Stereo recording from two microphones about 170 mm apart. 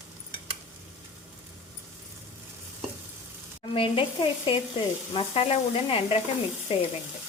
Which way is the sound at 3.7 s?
30° left (ahead or behind).